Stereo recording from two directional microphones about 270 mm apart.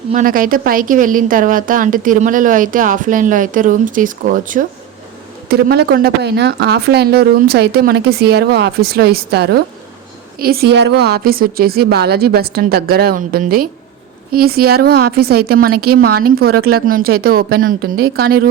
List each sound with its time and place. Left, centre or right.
0.1 s a woman's voice: right